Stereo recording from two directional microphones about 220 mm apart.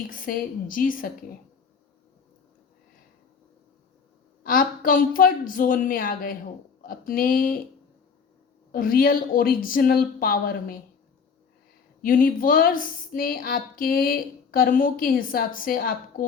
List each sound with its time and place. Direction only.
0.1 s speech: 40° left (ahead or behind)
4.4 s speech: 40° left (ahead or behind)
8.7 s speech: 40° left (ahead or behind)
12.0 s speech: 40° left (ahead or behind)